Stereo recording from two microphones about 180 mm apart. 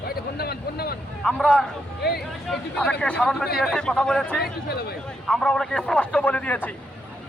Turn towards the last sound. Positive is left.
turn(degrees=10)  # may be behind; listen again after turning